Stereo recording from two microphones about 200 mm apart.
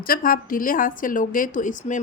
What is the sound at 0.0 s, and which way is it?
Speech, 45° left (ahead or behind).